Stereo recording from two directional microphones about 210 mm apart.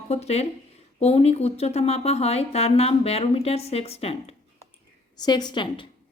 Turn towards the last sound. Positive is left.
turn(degrees=20)  # may be behind; listen again after turning